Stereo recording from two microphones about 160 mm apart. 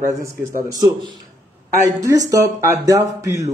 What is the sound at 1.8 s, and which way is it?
Speech, 20° right (ahead or behind).